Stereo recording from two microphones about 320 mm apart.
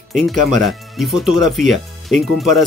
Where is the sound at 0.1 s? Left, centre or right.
Centre.